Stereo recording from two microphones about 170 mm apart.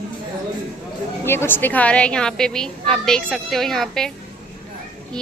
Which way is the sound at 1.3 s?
15° left (ahead or behind).